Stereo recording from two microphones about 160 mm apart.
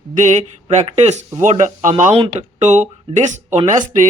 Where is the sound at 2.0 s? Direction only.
40° right (ahead or behind).